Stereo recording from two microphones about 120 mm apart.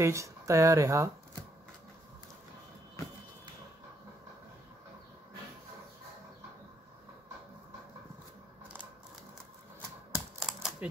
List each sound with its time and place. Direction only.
0.0 s speech: 25° right (ahead or behind)
10.1 s typewriter: 5° right (ahead or behind)